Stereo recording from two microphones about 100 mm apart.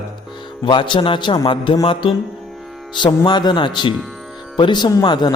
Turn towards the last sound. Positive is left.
turn(degrees=45)  # may be behind; listen again after turning